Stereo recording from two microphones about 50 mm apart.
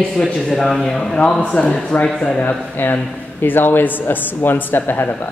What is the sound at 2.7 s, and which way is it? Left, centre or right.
Speech, left.